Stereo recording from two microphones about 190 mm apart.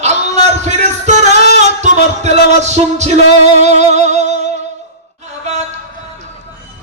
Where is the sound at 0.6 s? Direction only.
35° right (ahead or behind).